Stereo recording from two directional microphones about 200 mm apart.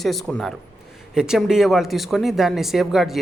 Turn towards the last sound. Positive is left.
turn(degrees=0)  # may be behind; listen again after turning